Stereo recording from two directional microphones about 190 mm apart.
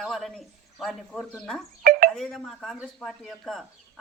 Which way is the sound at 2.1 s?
Centre (ahead or behind).